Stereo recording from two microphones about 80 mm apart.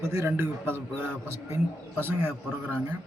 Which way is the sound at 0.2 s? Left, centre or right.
Right.